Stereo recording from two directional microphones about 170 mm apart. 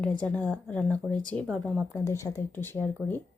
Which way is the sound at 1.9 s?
15° left (ahead or behind).